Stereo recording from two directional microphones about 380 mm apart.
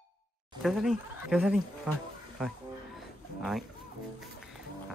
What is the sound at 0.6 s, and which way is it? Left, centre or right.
Speech, centre.